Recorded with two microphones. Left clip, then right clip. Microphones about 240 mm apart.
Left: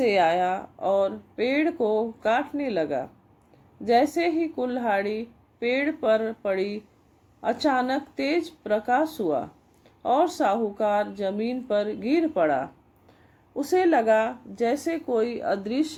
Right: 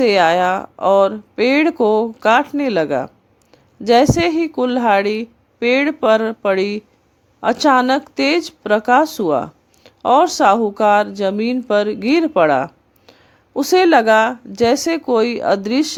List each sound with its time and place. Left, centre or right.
0.0 s speech: right